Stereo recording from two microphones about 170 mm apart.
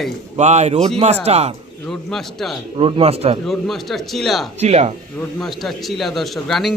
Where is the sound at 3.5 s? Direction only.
Centre (ahead or behind).